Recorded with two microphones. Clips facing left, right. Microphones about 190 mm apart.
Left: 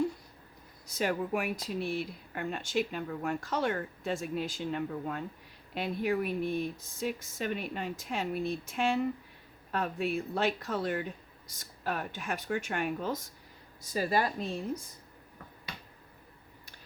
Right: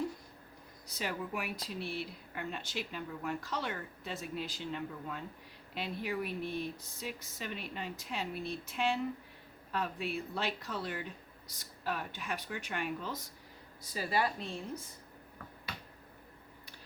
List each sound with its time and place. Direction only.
0.9 s speech: 50° left (ahead or behind)